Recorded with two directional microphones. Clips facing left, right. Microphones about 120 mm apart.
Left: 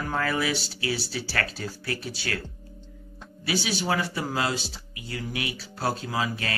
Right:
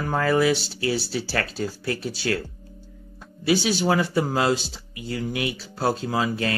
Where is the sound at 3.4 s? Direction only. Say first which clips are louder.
Right 6 dB; 30° right (ahead or behind).